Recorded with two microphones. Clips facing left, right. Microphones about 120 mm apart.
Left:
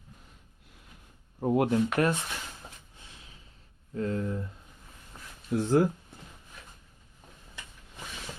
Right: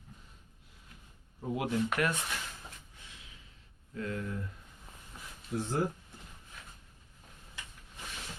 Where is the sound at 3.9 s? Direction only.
30° left (ahead or behind).